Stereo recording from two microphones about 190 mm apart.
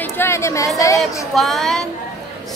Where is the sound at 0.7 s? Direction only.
15° left (ahead or behind).